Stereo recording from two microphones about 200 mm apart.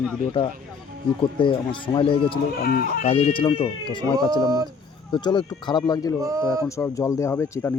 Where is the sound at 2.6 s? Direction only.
50° left (ahead or behind).